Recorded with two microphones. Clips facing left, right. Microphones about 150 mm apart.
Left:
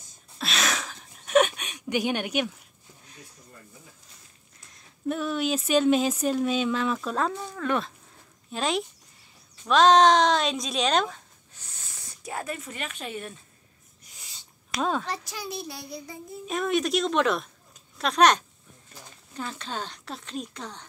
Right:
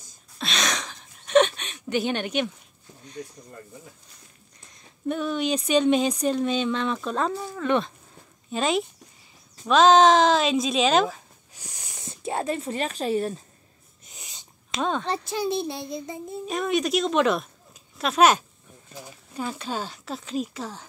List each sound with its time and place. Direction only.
0.4 s a sound: 5° left (ahead or behind)
3.2 s speech: 50° right (ahead or behind)
4.6 s speech: centre (ahead or behind); by 13.4 s 35° right (ahead or behind)
14.0 s sneeze: 20° right (ahead or behind)
14.8 s speech: 5° left (ahead or behind)
15.2 s child singing: 25° right (ahead or behind)
16.4 s speech: centre (ahead or behind)